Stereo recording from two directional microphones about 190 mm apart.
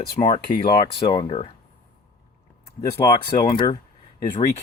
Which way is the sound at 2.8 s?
20° left (ahead or behind).